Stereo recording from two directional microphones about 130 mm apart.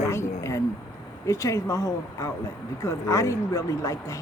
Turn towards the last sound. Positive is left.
turn(degrees=25)  # may be behind; listen again after turning